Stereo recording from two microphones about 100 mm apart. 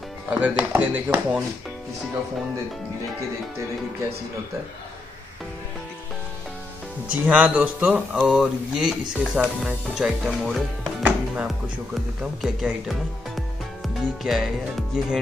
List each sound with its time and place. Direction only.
0.3 s speech: 15° right (ahead or behind)
7.1 s speech: 15° right (ahead or behind)
11.0 s music: 15° right (ahead or behind)
11.4 s speech: 5° right (ahead or behind)
14.2 s speech: centre (ahead or behind)